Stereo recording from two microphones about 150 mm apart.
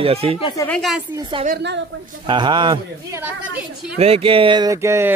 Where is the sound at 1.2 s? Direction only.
35° right (ahead or behind).